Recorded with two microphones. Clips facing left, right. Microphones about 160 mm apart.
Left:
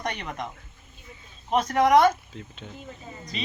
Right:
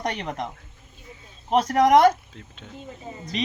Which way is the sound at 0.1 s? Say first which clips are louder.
Right 4 dB; 35° right (ahead or behind).